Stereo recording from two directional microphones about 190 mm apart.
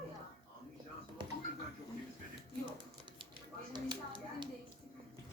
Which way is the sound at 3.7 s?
25° right (ahead or behind).